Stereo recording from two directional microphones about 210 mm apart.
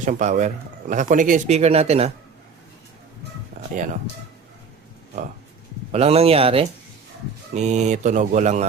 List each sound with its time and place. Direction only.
0.0 s a man's voice: 35° right (ahead or behind)
5.9 s a man's voice: 30° right (ahead or behind)